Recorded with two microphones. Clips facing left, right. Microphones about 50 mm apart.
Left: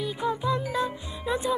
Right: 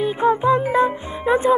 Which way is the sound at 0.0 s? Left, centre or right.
Right.